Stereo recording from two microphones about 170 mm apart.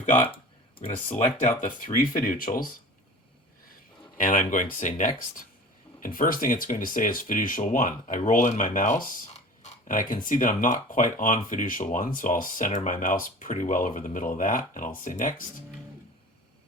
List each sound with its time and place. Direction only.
0.8 s speech: 35° left (ahead or behind)
1.6 s speech: 50° left (ahead or behind)
4.2 s speech: 50° left (ahead or behind)